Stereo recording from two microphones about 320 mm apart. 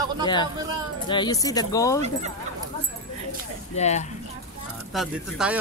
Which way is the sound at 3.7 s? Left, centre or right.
Left.